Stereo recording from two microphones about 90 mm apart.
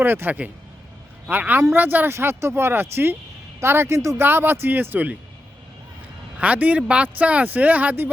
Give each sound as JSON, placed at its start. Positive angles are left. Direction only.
{"t": 0.0, "sound": "speech", "side_deg": -25}
{"t": 6.4, "sound": "speech", "side_deg": -15}